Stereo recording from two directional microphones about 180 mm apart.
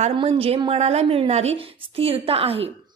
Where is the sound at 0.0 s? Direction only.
30° right (ahead or behind).